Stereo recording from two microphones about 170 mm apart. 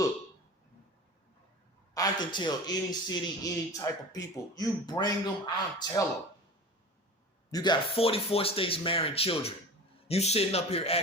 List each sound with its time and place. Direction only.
1.9 s a man's voice: 25° left (ahead or behind)
7.5 s speech: 25° left (ahead or behind)